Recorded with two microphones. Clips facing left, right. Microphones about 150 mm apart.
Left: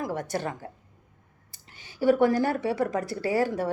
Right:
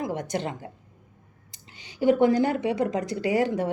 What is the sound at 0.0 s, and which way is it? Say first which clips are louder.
Speech: right 1 dB; 20° right (ahead or behind).